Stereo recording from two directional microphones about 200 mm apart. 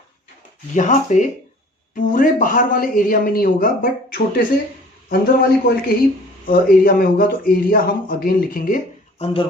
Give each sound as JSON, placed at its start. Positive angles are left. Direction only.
{"t": 0.7, "sound": "speech", "side_deg": 40}
{"t": 9.1, "sound": "speech", "side_deg": 30}